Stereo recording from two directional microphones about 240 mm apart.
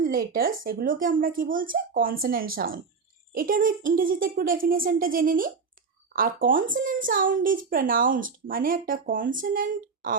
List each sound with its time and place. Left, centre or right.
0.0 s a woman's voice: right